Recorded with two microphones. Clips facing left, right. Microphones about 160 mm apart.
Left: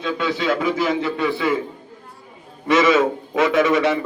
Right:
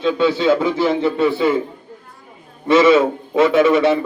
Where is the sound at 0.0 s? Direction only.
30° right (ahead or behind).